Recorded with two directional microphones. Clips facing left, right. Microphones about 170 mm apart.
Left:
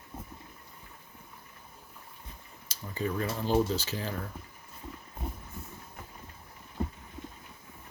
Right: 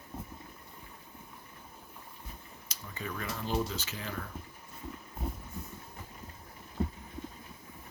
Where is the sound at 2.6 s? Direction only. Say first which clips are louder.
Left 8 dB; 35° left (ahead or behind).